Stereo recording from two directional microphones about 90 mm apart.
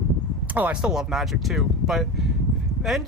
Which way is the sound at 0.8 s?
5° right (ahead or behind).